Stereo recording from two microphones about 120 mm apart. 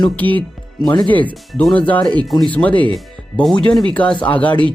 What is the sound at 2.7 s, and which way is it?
Speech, 45° right (ahead or behind).